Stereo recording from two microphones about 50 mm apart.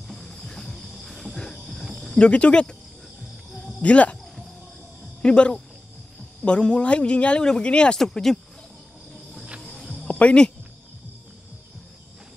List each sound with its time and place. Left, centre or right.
0.0 s cricket: centre
2.1 s speech: left
3.8 s speech: left
5.2 s speech: left
8.0 s speech: centre
9.6 s music: centre
10.0 s cricket: left